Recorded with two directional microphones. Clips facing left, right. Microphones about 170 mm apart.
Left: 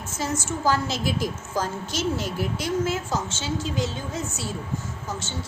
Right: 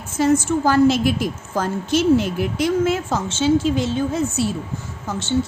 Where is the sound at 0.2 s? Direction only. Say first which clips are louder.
Right 11 dB; 55° right (ahead or behind).